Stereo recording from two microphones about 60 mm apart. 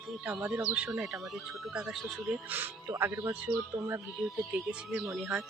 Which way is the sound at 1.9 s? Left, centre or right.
Centre.